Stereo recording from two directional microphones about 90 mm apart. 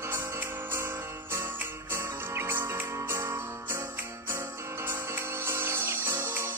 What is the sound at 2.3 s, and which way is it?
Music, 25° right (ahead or behind).